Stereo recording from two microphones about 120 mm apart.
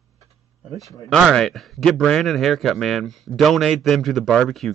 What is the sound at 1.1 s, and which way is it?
A man's voice, 5° left (ahead or behind).